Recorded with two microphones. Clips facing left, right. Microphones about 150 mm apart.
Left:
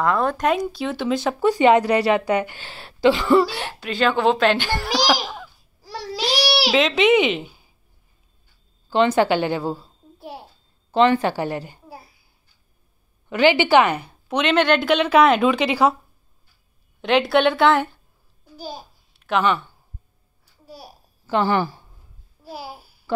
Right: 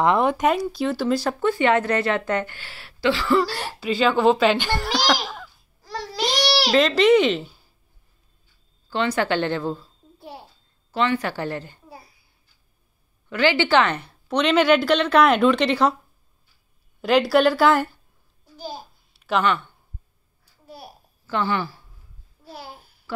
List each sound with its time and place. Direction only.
0.0 s speech: 20° right (ahead or behind)
0.7 s a woman's voice: 5° right (ahead or behind)
1.4 s a woman's voice: 15° left (ahead or behind)
3.4 s a woman's voice: centre (ahead or behind)
4.6 s babbling: 10° left (ahead or behind)
8.9 s a woman's voice: 20° left (ahead or behind)
10.1 s babbling: centre (ahead or behind)
10.9 s a woman's voice: 25° left (ahead or behind)
11.3 s a woman's voice: 15° left (ahead or behind)
13.3 s a woman's voice: 15° left (ahead or behind)
17.0 s a woman's voice: centre (ahead or behind)
22.4 s babbling: 5° left (ahead or behind)